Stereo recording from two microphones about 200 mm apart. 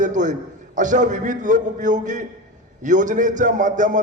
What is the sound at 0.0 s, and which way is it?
A man's voice, 40° right (ahead or behind).